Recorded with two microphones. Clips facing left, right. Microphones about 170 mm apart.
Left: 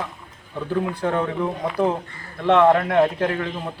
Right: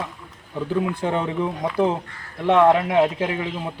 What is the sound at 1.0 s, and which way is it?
Speech, 20° right (ahead or behind).